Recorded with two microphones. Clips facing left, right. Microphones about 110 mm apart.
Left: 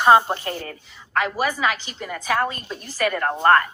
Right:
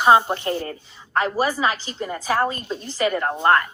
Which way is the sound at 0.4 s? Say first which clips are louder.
Right 5 dB; 30° right (ahead or behind).